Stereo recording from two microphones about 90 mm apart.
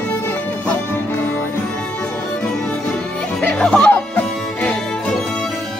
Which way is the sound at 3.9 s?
20° left (ahead or behind).